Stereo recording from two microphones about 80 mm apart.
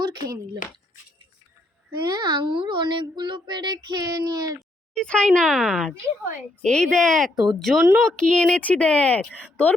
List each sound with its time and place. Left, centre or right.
0.0 s speech: right
2.0 s a child's voice: right
4.9 s speech: centre
5.5 s speech: centre
6.6 s speech: centre